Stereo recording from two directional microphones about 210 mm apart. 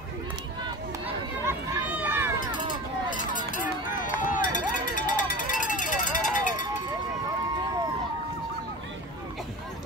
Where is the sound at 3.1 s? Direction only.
40° left (ahead or behind).